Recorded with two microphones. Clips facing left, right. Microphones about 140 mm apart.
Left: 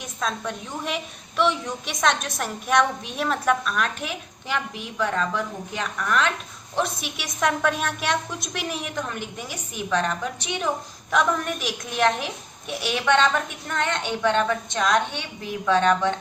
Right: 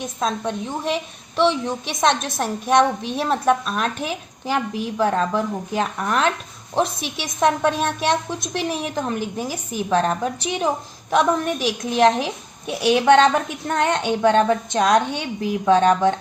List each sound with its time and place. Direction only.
0.0 s a woman's voice: 30° right (ahead or behind)